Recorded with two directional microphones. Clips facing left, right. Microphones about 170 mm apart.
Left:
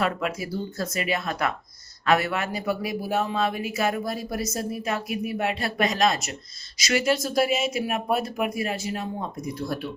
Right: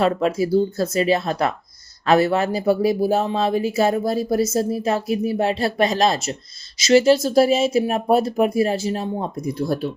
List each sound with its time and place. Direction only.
0.0 s speech: 30° right (ahead or behind)